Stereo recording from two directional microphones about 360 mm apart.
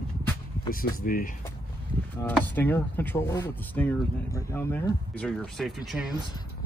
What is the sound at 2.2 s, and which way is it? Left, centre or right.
Speech, centre.